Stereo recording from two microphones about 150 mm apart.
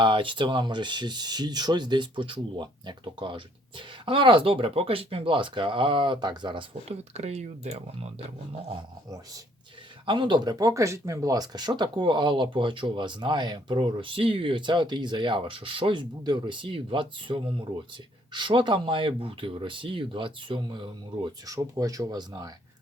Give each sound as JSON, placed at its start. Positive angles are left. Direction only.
{"t": 0.0, "sound": "speech", "side_deg": -35}
{"t": 9.0, "sound": "speech", "side_deg": -25}
{"t": 21.5, "sound": "speech", "side_deg": -25}